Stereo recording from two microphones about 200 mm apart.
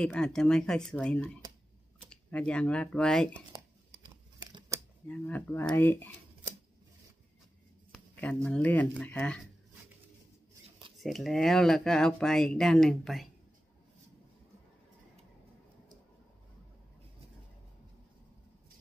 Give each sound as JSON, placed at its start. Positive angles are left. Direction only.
{"t": 0.0, "sound": "speech", "side_deg": 5}
{"t": 4.0, "sound": "a sound", "side_deg": -20}
{"t": 5.0, "sound": "speech", "side_deg": 5}
{"t": 8.5, "sound": "speech", "side_deg": 5}
{"t": 11.0, "sound": "speech", "side_deg": 0}